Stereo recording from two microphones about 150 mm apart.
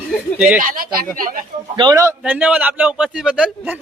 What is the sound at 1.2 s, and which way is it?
Speech, 70° right (ahead or behind).